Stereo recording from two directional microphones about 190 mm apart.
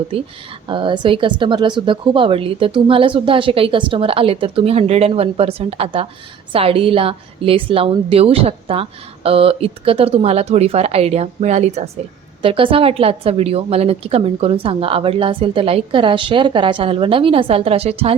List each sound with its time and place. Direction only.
0.7 s a woman's voice: 25° right (ahead or behind)